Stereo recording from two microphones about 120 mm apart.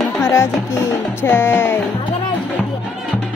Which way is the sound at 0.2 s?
25° left (ahead or behind).